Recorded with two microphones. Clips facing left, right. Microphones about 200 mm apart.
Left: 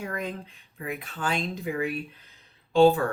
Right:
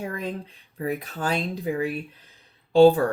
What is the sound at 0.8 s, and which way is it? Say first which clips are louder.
Speech: right 5 dB; 40° right (ahead or behind).